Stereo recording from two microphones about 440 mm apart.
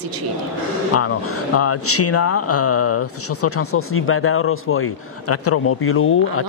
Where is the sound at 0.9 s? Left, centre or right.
Left.